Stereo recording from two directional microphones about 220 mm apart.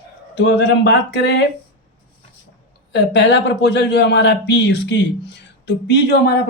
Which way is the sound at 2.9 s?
50° left (ahead or behind).